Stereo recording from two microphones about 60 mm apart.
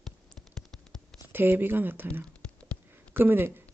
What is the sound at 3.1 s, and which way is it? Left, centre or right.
Speech, right.